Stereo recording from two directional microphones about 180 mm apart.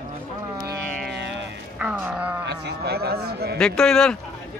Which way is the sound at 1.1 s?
75° right (ahead or behind).